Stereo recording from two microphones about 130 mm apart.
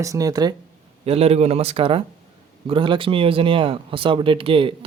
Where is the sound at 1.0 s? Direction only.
50° right (ahead or behind).